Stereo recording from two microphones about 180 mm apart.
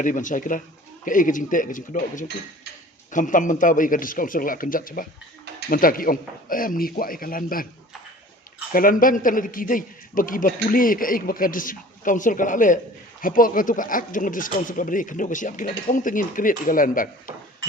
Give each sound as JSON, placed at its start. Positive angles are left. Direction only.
{"t": 0.0, "sound": "a man's voice", "side_deg": 45}
{"t": 8.7, "sound": "a man's voice", "side_deg": 50}